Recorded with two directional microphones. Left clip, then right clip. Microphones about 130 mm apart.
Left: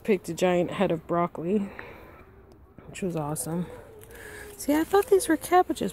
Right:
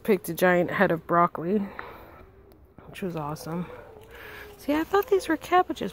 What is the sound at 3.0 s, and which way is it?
Speech, 30° left (ahead or behind).